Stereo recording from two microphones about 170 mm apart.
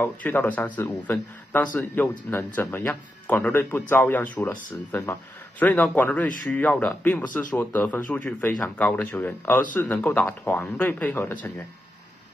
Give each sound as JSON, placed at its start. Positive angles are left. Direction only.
{"t": 0.0, "sound": "speech", "side_deg": 10}